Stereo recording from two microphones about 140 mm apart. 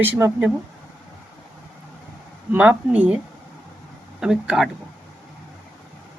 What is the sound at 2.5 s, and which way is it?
Speech, 10° right (ahead or behind).